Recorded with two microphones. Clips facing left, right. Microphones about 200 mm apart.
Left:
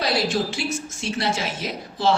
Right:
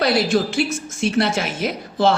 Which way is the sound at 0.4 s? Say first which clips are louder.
Right 5 dB; 60° right (ahead or behind).